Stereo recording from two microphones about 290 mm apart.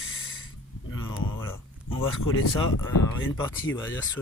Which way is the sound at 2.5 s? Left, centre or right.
Left.